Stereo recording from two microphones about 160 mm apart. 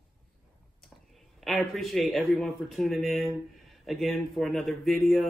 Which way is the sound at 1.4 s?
Centre (ahead or behind).